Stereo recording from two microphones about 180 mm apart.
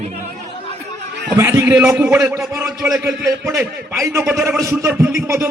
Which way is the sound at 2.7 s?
Centre (ahead or behind).